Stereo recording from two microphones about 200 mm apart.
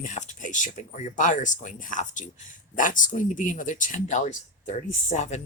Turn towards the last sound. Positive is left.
turn(degrees=35)  # may be behind; listen again after turning